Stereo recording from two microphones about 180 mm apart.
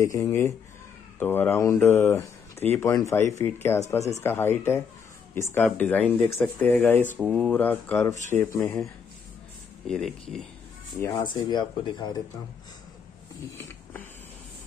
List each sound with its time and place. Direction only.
0.0 s speech: 20° left (ahead or behind)
9.8 s speech: 5° left (ahead or behind)
11.0 s speech: 20° left (ahead or behind)